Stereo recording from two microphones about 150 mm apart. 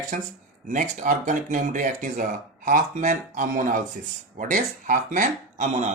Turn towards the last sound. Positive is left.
turn(degrees=-55)  # may be behind; listen again after turning